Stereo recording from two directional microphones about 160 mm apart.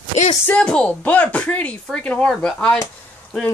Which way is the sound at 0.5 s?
5° left (ahead or behind).